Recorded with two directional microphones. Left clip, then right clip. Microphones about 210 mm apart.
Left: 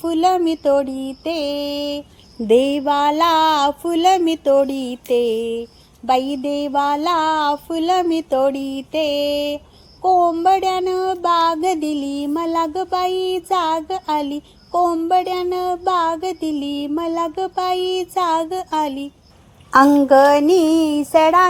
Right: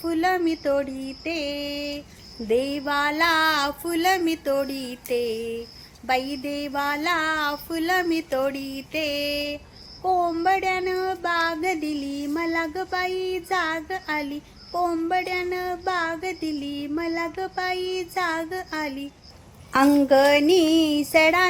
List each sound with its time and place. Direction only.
0.1 s child singing: 25° left (ahead or behind)
2.5 s a sound: 35° left (ahead or behind)
6.1 s child singing: 30° left (ahead or behind); by 21.4 s 15° left (ahead or behind)